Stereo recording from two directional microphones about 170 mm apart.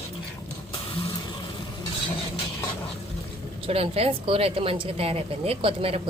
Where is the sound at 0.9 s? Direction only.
35° left (ahead or behind).